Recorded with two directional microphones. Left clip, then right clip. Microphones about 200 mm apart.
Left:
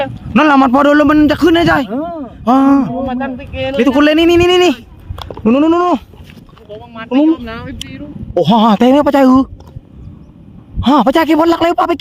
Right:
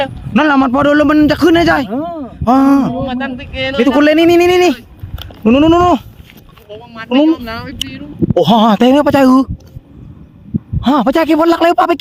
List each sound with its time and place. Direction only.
0.3 s a man's voice: 10° left (ahead or behind)
3.1 s speech: 15° right (ahead or behind)
3.8 s speech: 5° left (ahead or behind)
5.4 s a man's voice: 5° right (ahead or behind)
6.7 s speech: 50° right (ahead or behind)
8.4 s a man's voice: 5° right (ahead or behind)
10.8 s a man's voice: 5° left (ahead or behind)